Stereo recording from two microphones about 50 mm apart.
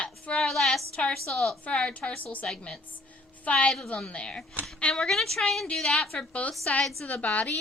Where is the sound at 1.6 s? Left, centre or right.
Left.